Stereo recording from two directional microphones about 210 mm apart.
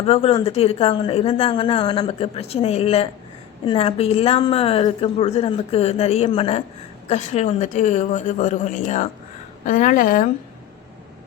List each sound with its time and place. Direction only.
0.0 s a woman's voice: 30° left (ahead or behind)